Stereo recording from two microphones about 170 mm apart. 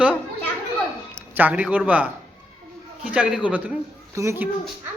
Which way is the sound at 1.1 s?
10° right (ahead or behind).